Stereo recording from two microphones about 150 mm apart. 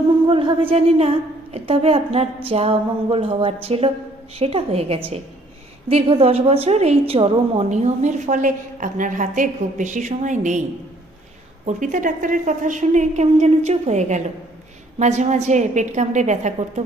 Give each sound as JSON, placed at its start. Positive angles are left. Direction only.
{"t": 0.3, "sound": "a woman's voice", "side_deg": -35}
{"t": 11.6, "sound": "a woman's voice", "side_deg": -55}